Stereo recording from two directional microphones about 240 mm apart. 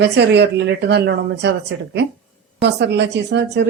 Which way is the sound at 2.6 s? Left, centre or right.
Right.